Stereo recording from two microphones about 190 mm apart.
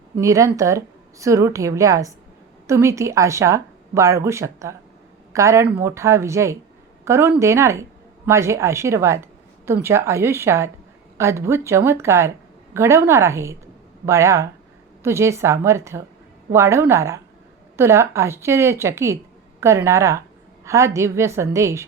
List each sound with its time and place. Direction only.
0.2 s speech: 15° right (ahead or behind)